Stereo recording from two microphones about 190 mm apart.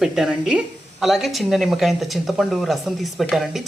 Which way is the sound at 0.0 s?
5° right (ahead or behind).